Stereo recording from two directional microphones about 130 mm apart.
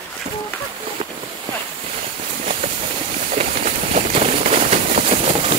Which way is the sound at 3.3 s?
65° right (ahead or behind).